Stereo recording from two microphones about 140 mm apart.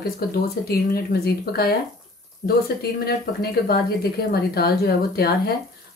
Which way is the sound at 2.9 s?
90° left.